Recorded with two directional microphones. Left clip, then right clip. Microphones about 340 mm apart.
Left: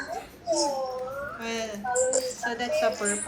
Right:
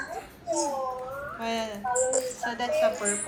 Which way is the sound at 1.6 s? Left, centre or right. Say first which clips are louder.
Left 3 dB; centre.